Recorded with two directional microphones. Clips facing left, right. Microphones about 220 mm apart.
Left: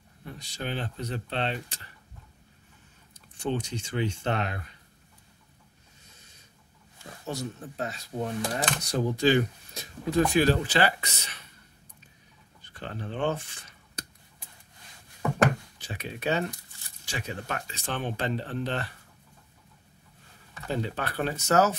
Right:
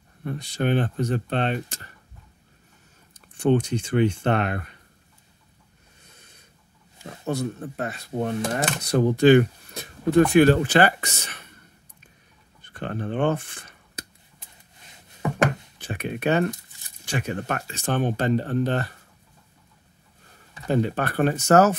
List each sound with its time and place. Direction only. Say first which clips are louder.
0.2 s speech: right 11 dB; 55° right (ahead or behind)
3.3 s speech: right 10 dB; 55° right (ahead or behind)
6.0 s a sound: right 5 dB; 60° right (ahead or behind)
7.2 s speech: right 7 dB; 55° right (ahead or behind)
12.6 s speech: right 7 dB; 55° right (ahead or behind)
15.8 s speech: right 8 dB; 55° right (ahead or behind)
16.4 s a sound: right 8 dB; 15° right (ahead or behind)
17.0 s speech: right 8 dB; 55° right (ahead or behind)
20.7 s speech: right 8 dB; 55° right (ahead or behind)